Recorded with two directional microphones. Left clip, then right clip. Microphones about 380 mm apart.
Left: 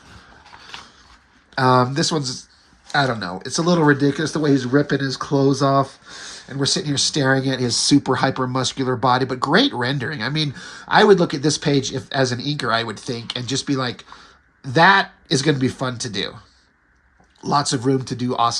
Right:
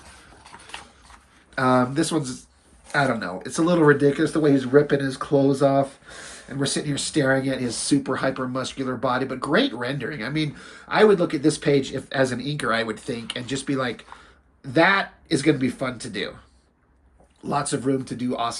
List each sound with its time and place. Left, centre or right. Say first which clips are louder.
1.5 s speech: left 4 dB; centre
17.4 s speech: left 5 dB; centre